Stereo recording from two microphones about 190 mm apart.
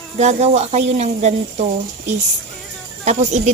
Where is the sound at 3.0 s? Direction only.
35° right (ahead or behind).